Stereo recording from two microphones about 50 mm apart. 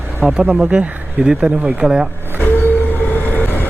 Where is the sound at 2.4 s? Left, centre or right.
Left.